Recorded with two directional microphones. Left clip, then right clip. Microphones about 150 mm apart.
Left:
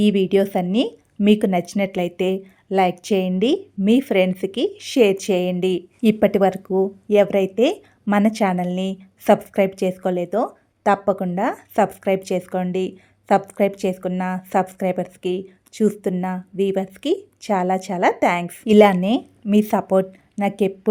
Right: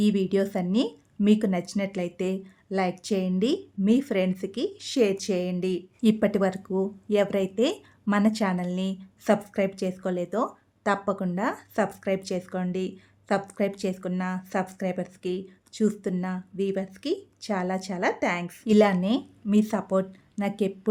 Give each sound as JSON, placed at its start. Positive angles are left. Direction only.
{"t": 0.1, "sound": "a woman's voice", "side_deg": 25}